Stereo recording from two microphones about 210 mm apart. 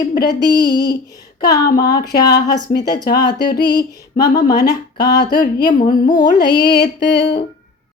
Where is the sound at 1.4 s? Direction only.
15° left (ahead or behind).